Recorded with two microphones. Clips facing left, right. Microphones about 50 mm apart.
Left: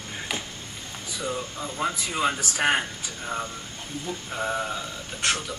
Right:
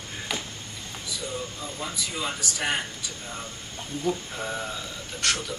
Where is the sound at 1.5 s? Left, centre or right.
Left.